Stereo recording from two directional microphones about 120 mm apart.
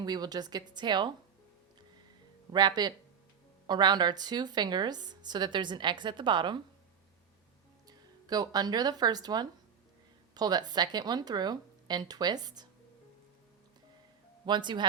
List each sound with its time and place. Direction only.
0.0 s a woman's voice: 35° right (ahead or behind)
2.5 s a woman's voice: 35° right (ahead or behind)
7.9 s a woman's voice: 35° right (ahead or behind)
14.4 s a woman's voice: 40° right (ahead or behind)